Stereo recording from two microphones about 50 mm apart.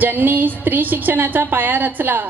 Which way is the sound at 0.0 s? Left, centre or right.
Right.